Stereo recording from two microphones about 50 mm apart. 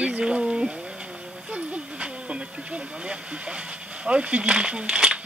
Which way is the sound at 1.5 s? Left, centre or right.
Right.